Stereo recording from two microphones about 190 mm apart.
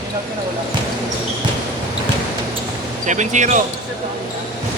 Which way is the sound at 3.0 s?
40° right (ahead or behind).